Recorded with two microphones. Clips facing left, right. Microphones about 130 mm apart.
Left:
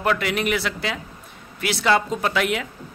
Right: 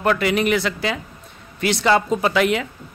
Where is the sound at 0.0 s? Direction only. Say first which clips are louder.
Right 4 dB; centre (ahead or behind).